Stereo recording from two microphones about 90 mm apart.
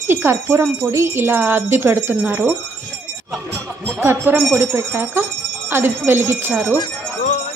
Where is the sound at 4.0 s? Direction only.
25° right (ahead or behind).